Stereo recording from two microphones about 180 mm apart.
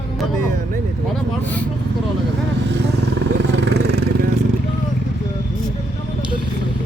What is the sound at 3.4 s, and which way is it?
Vehicle, 75° right (ahead or behind).